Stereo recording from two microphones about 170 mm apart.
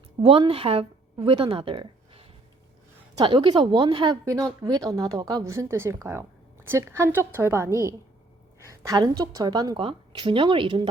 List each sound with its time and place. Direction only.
0.2 s a woman's voice: 35° right (ahead or behind)